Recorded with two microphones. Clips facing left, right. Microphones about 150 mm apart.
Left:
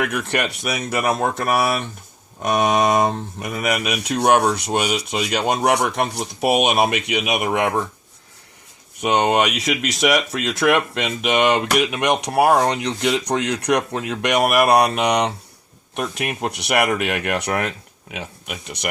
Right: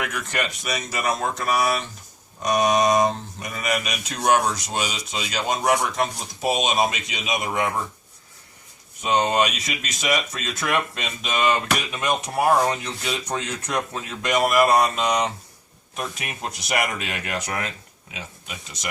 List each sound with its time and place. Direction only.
0.0 s speech: 65° left (ahead or behind)
9.0 s speech: 70° left (ahead or behind)